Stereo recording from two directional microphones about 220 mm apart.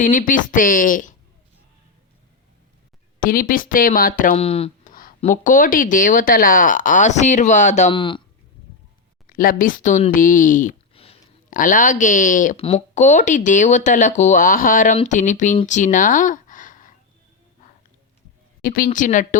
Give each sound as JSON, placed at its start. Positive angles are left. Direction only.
{"t": 0.0, "sound": "speech", "side_deg": 35}
{"t": 3.2, "sound": "speech", "side_deg": 40}
{"t": 4.9, "sound": "speech", "side_deg": 40}
{"t": 7.9, "sound": "speech", "side_deg": 20}
{"t": 9.2, "sound": "speech", "side_deg": 40}
{"t": 11.5, "sound": "speech", "side_deg": 35}
{"t": 18.6, "sound": "a woman's voice", "side_deg": 40}